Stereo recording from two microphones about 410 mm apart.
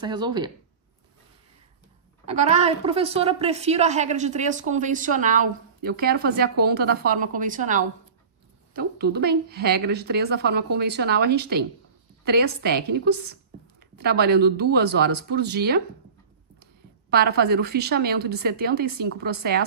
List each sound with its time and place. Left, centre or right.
0.0 s a woman's voice: centre
2.2 s a woman's voice: centre
17.1 s a woman's voice: right